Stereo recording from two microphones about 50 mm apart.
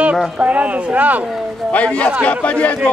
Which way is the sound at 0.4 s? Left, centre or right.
Right.